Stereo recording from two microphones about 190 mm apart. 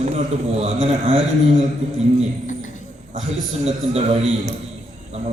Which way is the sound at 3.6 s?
35° right (ahead or behind).